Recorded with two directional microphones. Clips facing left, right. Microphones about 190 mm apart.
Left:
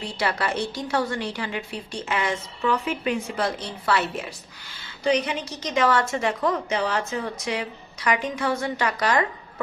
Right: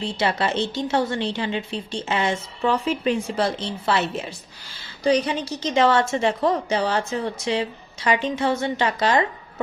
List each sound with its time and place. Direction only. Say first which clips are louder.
0.0 s a woman's voice: right 3 dB; 25° right (ahead or behind)
5.0 s a woman's voice: right 3 dB; 35° right (ahead or behind)